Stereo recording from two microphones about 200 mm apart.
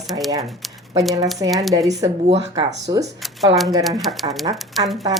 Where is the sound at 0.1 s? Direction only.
20° right (ahead or behind).